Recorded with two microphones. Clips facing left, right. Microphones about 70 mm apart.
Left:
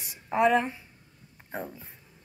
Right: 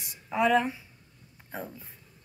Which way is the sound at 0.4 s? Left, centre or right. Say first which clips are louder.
Left 1 dB; centre.